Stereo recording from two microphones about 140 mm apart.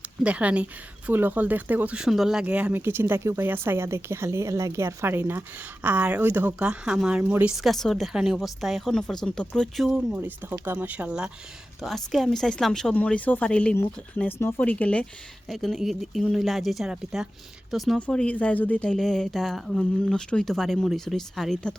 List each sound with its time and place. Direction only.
0.2 s speech: 10° right (ahead or behind)
10.2 s speech: 15° right (ahead or behind); by 21.8 s 5° left (ahead or behind)